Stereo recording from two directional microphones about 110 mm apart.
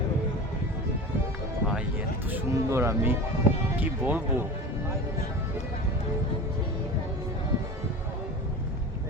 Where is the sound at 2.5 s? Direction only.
25° right (ahead or behind).